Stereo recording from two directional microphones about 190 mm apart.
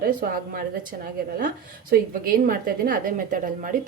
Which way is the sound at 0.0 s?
50° right (ahead or behind).